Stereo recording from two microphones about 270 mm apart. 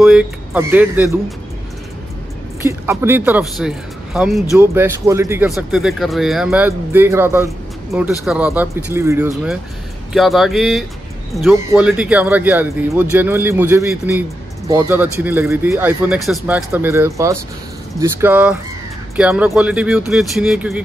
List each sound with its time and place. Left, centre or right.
0.0 s a man's voice: centre
2.6 s a man's voice: centre